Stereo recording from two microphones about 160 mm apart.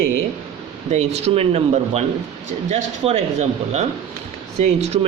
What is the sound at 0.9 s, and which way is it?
A man's voice, 40° right (ahead or behind).